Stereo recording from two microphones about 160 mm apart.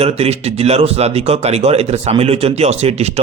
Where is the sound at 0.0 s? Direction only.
40° right (ahead or behind).